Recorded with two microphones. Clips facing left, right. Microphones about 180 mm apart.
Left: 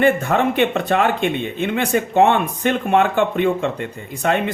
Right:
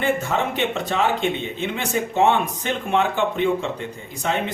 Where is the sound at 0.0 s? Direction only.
60° left (ahead or behind).